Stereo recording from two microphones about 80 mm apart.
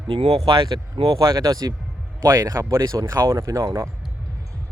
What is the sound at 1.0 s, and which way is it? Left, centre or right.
Speech, right.